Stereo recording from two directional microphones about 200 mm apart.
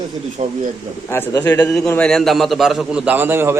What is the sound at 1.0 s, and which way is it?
A man's voice, 10° left (ahead or behind).